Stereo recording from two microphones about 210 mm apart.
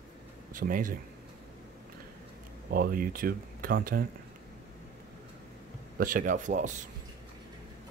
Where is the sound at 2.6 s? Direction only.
45° right (ahead or behind).